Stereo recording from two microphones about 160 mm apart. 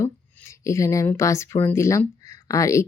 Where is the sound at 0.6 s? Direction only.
20° left (ahead or behind).